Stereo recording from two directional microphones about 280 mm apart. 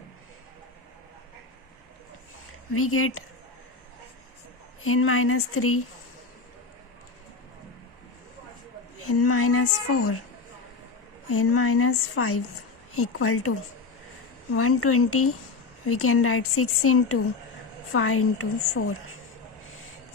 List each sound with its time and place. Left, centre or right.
2.7 s a woman's voice: left
4.8 s a woman's voice: left
9.0 s a woman's voice: left
11.3 s a woman's voice: left
14.5 s a woman's voice: left